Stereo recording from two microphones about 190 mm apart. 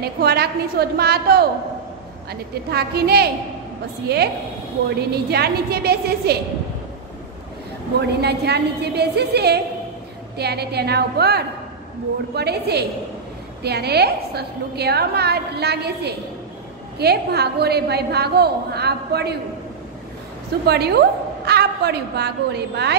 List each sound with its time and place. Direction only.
0.0 s a woman's voice: 55° right (ahead or behind)
2.7 s a woman's voice: 55° right (ahead or behind)
8.2 s a woman's voice: 60° right (ahead or behind)
20.6 s a woman's voice: 60° right (ahead or behind)